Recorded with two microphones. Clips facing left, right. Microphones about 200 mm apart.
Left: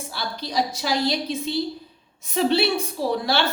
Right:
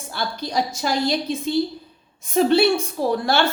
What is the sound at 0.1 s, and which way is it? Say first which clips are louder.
A woman's voice: right 5 dB; 50° right (ahead or behind).